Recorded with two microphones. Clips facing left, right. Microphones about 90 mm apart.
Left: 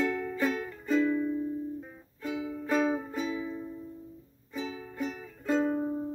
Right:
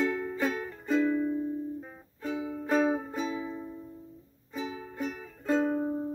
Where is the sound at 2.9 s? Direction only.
20° right (ahead or behind).